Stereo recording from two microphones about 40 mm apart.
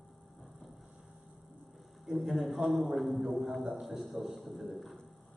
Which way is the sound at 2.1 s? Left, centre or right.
Centre.